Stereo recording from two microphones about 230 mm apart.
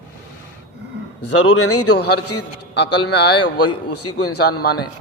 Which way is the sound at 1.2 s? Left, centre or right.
Left.